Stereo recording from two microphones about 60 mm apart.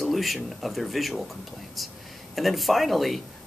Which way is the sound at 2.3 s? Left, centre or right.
Centre.